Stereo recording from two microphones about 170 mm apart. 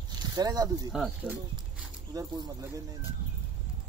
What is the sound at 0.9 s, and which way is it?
Speech, 5° right (ahead or behind).